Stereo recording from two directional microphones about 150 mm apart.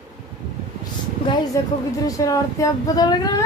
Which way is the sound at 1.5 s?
20° left (ahead or behind).